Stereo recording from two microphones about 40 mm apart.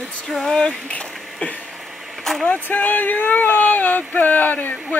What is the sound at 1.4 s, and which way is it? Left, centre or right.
Speech, left.